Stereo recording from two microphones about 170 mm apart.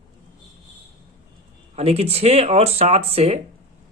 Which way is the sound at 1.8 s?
35° right (ahead or behind).